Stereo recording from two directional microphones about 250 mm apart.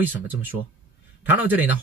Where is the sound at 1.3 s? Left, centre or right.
Centre.